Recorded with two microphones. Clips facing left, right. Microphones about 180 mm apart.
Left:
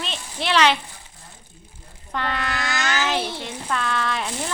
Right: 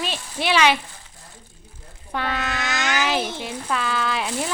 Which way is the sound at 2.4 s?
20° right (ahead or behind).